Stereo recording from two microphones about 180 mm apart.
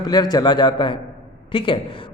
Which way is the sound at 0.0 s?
25° left (ahead or behind).